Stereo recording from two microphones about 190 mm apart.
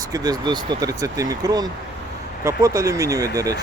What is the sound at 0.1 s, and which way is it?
Speech, 20° right (ahead or behind).